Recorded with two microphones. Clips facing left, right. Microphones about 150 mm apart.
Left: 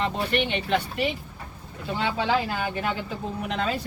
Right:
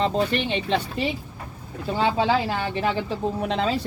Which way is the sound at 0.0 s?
30° right (ahead or behind).